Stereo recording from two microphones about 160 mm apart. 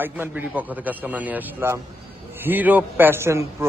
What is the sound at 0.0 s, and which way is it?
A man's voice, 10° right (ahead or behind).